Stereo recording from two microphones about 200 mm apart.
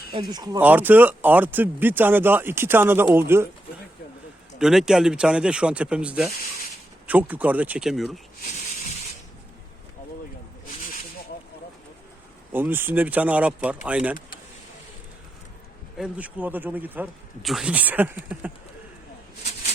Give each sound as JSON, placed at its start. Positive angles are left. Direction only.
{"t": 0.1, "sound": "speech", "side_deg": -20}
{"t": 0.6, "sound": "speech", "side_deg": -10}
{"t": 4.5, "sound": "speech", "side_deg": 0}
{"t": 12.5, "sound": "speech", "side_deg": -10}
{"t": 16.0, "sound": "speech", "side_deg": -5}